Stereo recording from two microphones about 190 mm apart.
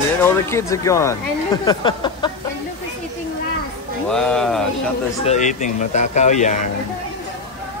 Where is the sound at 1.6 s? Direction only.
25° left (ahead or behind).